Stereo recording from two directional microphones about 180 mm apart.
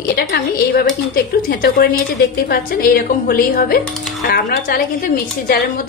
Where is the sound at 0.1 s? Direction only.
60° left (ahead or behind).